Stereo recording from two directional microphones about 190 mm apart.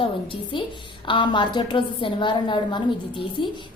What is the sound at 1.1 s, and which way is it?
A woman's voice, 25° left (ahead or behind).